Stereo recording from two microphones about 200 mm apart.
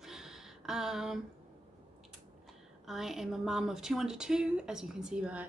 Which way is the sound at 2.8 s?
Centre (ahead or behind).